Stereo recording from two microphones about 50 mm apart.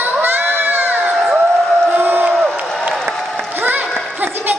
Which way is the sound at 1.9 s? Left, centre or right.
Right.